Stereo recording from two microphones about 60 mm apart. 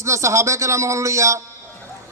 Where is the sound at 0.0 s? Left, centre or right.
Right.